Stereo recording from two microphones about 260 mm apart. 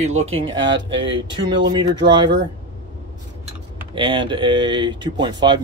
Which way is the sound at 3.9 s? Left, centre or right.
Centre.